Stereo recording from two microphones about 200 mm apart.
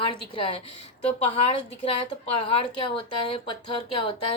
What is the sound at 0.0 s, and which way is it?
A woman's voice, 25° left (ahead or behind).